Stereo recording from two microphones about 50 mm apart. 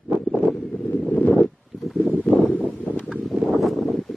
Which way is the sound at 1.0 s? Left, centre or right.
Left.